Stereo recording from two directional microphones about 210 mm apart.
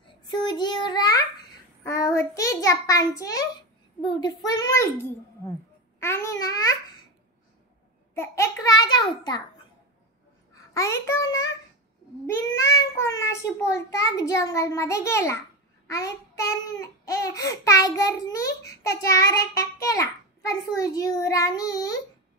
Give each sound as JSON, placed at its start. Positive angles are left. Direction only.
{"t": 0.0, "sound": "child singing", "side_deg": 20}
{"t": 1.8, "sound": "a sound", "side_deg": 15}
{"t": 4.0, "sound": "a child's voice", "side_deg": 20}
{"t": 5.9, "sound": "a child's voice", "side_deg": 10}
{"t": 8.1, "sound": "a sound", "side_deg": 10}
{"t": 10.5, "sound": "a child's voice", "side_deg": 15}